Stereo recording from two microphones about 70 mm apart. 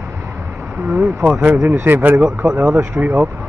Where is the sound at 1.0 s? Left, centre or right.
Right.